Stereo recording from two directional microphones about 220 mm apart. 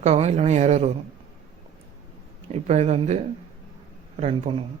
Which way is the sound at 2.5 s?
30° right (ahead or behind).